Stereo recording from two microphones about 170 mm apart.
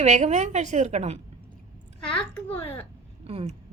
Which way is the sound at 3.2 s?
35° right (ahead or behind).